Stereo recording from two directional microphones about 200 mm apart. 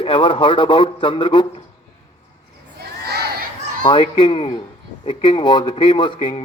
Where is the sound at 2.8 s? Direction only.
55° right (ahead or behind).